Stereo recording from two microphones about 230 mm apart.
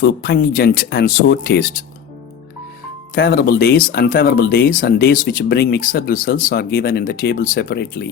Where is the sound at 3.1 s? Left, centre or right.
Left.